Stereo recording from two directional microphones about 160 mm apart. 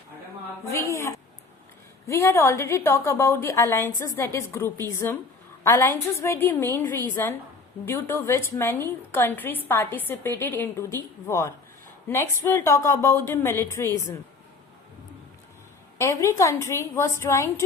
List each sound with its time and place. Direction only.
0.7 s a sound: 20° left (ahead or behind)
2.0 s a woman's voice: 15° left (ahead or behind)
16.0 s a woman's voice: 15° left (ahead or behind)